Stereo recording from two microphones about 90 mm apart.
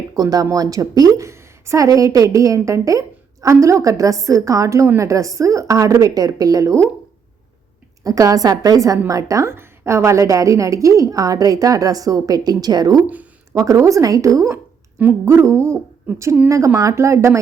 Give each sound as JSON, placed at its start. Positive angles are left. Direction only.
{"t": 0.2, "sound": "a woman's voice", "side_deg": -45}
{"t": 8.0, "sound": "a woman's voice", "side_deg": -40}
{"t": 14.5, "sound": "dog", "side_deg": -20}
{"t": 16.5, "sound": "a woman's voice", "side_deg": -35}